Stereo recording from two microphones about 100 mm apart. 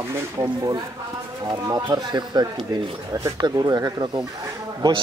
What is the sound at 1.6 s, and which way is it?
Speech, 45° right (ahead or behind).